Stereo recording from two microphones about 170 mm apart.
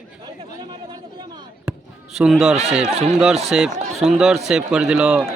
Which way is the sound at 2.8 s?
40° right (ahead or behind).